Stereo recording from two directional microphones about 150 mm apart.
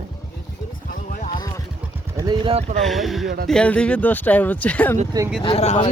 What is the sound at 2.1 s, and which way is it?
Speech, 25° right (ahead or behind).